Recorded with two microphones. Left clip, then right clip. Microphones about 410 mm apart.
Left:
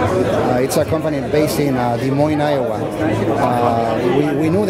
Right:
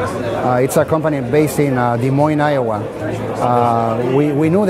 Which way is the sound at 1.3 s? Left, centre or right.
Right.